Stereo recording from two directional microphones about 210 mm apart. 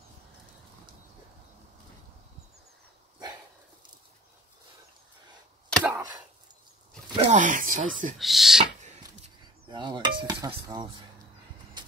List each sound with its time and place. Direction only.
5.7 s chop: 5° right (ahead or behind)
7.2 s speech: 35° right (ahead or behind)
8.2 s speech: centre (ahead or behind)
9.7 s cutlery: 20° right (ahead or behind)